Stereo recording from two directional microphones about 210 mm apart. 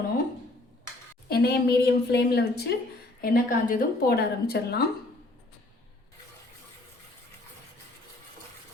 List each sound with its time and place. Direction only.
1.3 s a woman's voice: 50° left (ahead or behind)